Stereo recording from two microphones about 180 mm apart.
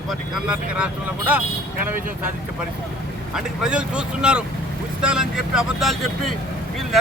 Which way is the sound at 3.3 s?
5° right (ahead or behind).